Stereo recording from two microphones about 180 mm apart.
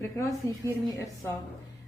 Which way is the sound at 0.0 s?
15° left (ahead or behind).